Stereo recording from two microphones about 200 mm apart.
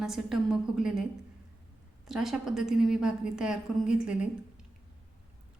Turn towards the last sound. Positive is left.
turn(degrees=-5)  # may be behind; listen again after turning